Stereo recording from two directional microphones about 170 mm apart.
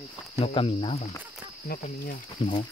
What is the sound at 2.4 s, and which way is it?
Speech, 30° left (ahead or behind).